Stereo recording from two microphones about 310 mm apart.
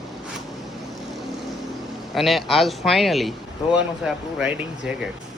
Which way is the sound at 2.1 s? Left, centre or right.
Centre.